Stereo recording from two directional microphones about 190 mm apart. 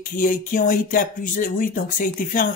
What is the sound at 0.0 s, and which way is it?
Speech, 45° left (ahead or behind).